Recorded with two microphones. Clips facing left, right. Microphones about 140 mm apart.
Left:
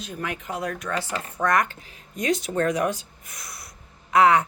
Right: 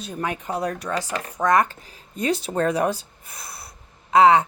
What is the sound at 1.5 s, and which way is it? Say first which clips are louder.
Speech: right 3 dB; 35° right (ahead or behind).